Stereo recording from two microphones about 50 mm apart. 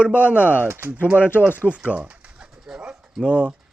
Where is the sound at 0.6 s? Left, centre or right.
Right.